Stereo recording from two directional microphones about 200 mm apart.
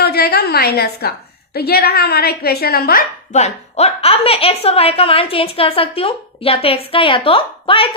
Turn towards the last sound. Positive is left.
turn(degrees=25)  # may be behind; listen again after turning